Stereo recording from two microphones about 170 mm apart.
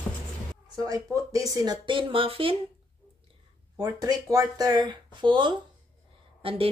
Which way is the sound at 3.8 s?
20° right (ahead or behind).